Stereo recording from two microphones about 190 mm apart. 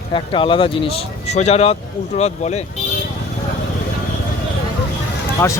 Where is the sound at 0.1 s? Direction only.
25° left (ahead or behind).